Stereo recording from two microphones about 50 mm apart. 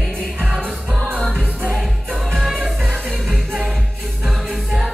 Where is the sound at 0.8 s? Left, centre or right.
Centre.